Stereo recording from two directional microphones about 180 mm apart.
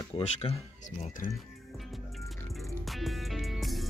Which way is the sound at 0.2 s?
35° left (ahead or behind).